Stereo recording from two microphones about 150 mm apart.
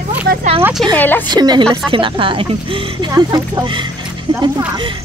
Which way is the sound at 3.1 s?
25° right (ahead or behind).